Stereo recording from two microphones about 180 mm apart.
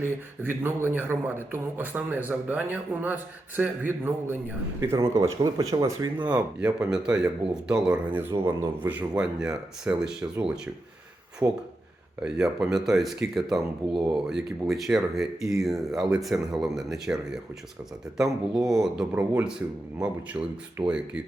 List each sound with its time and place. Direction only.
0.0 s speech: 10° right (ahead or behind)
6.2 s speech: 5° right (ahead or behind)
11.4 s speech: 15° right (ahead or behind)
12.2 s speech: 5° right (ahead or behind)